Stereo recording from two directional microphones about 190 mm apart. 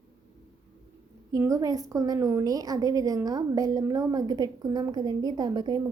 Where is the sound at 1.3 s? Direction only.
15° right (ahead or behind).